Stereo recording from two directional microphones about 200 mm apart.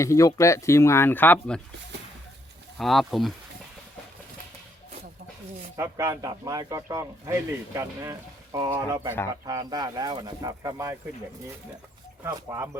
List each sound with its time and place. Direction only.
0.0 s speech: 15° left (ahead or behind)
2.7 s speech: centre (ahead or behind)
5.7 s speech: 15° right (ahead or behind)
12.2 s speech: 15° right (ahead or behind)